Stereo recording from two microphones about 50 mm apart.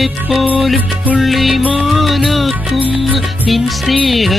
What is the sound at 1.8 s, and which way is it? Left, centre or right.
Music, centre.